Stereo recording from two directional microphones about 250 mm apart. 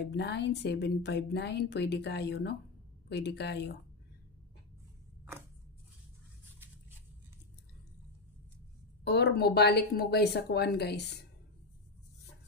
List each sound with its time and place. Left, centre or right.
0.0 s speech: left
9.0 s a woman's voice: left